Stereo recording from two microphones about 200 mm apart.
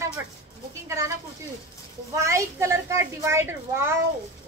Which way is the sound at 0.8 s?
15° right (ahead or behind).